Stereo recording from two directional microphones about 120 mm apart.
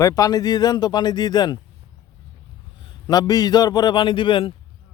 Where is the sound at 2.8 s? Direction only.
35° left (ahead or behind).